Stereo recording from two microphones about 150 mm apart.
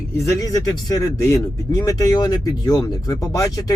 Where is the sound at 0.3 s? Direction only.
25° left (ahead or behind).